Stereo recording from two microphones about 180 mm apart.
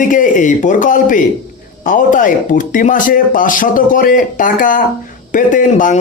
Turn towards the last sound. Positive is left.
turn(degrees=45)  # may be behind; listen again after turning